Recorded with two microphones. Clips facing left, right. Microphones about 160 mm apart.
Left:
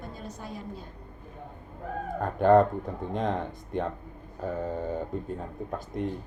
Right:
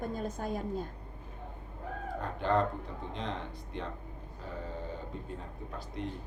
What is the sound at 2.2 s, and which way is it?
A man's voice, 50° left (ahead or behind).